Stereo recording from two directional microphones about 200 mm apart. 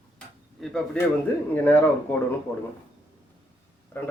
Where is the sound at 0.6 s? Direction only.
5° left (ahead or behind).